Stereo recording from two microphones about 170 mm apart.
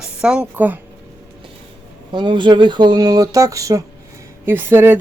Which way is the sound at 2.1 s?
30° right (ahead or behind).